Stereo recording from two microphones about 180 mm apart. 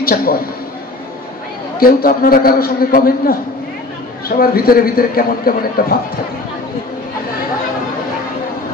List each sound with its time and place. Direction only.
0.0 s a man's voice: 55° left (ahead or behind)
1.8 s a man's voice: 55° left (ahead or behind)
4.4 s a man's voice: 55° left (ahead or behind)